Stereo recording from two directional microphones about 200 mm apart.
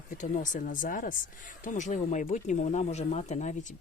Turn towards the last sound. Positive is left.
turn(degrees=35)  # may be behind; listen again after turning